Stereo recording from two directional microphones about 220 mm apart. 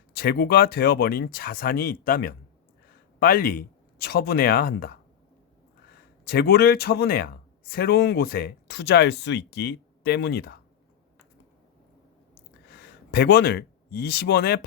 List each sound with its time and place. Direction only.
0.1 s speech: 45° left (ahead or behind)
6.2 s speech: 45° left (ahead or behind)
13.1 s speech: 45° left (ahead or behind)